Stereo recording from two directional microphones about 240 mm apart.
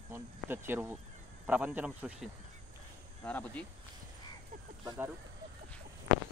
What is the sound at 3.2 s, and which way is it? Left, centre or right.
Speech, centre.